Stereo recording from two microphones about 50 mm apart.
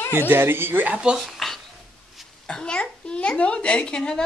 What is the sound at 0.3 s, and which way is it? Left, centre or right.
Speech, right.